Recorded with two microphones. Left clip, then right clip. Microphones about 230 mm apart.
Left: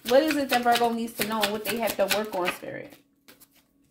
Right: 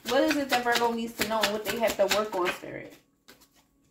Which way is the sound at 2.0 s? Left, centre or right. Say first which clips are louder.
Left 1 dB; left.